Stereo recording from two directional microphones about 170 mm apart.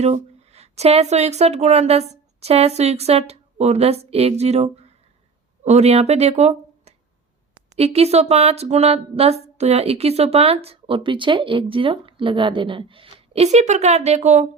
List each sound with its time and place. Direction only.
0.0 s speech: 40° right (ahead or behind)